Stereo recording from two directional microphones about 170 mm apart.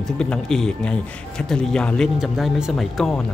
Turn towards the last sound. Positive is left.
turn(degrees=0)  # may be behind; listen again after turning